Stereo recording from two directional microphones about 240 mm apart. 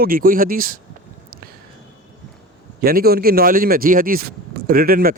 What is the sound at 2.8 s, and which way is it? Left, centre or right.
Speech, right.